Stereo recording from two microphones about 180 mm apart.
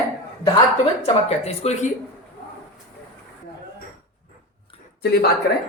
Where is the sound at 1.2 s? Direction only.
35° left (ahead or behind).